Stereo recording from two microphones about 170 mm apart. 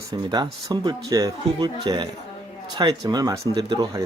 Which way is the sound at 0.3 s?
25° right (ahead or behind).